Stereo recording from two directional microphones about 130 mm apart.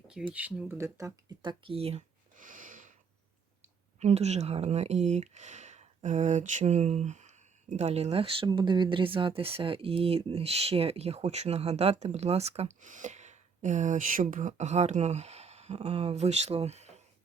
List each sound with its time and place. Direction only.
0.2 s speech: 5° right (ahead or behind)
0.8 s speech: 25° right (ahead or behind)
1.4 s speech: 40° right (ahead or behind)
2.3 s a sound: 90° right
4.0 s speech: 55° right (ahead or behind)